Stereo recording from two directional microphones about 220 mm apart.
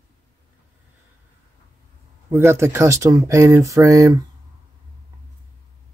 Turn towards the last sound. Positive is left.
turn(degrees=-15)  # may be behind; listen again after turning